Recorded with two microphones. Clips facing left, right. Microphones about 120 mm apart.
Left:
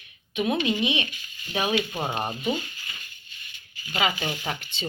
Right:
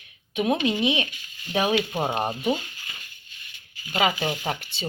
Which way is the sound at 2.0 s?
15° right (ahead or behind).